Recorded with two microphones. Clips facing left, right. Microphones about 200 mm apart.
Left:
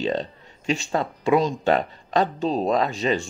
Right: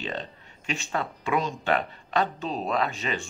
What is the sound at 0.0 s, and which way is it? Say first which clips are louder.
Speech: left 9 dB; 35° left (ahead or behind).